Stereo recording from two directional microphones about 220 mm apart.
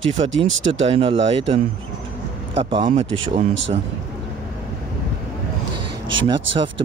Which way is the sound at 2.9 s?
30° right (ahead or behind).